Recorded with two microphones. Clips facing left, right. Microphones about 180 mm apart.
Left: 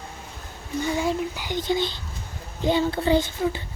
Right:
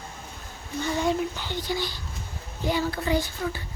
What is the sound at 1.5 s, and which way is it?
Speech, 20° left (ahead or behind).